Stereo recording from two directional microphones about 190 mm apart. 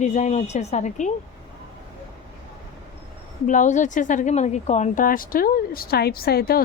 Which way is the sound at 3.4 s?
40° left (ahead or behind).